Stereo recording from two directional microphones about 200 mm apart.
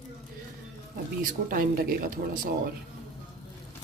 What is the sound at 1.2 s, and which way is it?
Speech, 45° right (ahead or behind).